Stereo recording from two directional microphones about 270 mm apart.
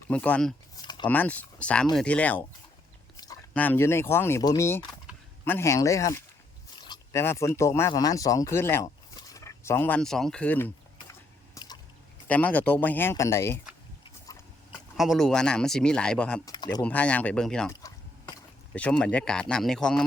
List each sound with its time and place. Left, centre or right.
0.1 s speech: centre
0.8 s a sound: centre
1.0 s speech: centre
11.5 s liquid: centre
12.3 s speech: centre
14.9 s speech: centre